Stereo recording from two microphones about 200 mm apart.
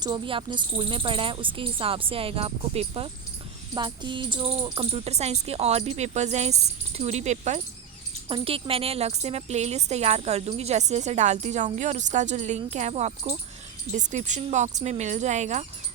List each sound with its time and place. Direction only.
0.0 s a woman's voice: 25° right (ahead or behind)